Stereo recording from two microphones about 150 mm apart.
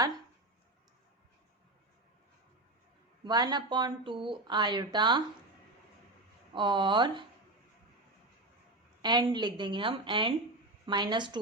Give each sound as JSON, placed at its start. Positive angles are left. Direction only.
{"t": 3.2, "sound": "speech", "side_deg": -30}
{"t": 6.5, "sound": "speech", "side_deg": -30}
{"t": 9.0, "sound": "speech", "side_deg": -30}